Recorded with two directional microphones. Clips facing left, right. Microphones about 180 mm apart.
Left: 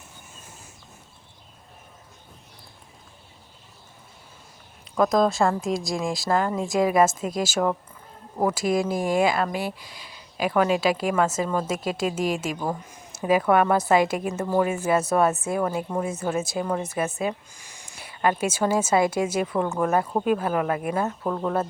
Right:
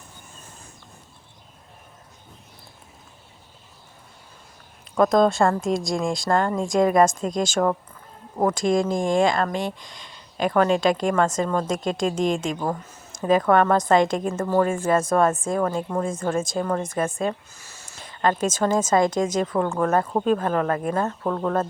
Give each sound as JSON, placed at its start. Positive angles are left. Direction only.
{"t": 4.9, "sound": "a woman's voice", "side_deg": 0}